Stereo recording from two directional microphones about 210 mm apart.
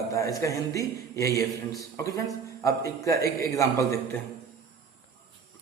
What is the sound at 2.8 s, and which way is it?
Speech, 15° left (ahead or behind).